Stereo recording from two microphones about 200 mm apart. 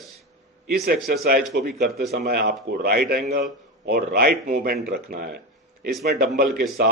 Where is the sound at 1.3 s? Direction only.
50° right (ahead or behind).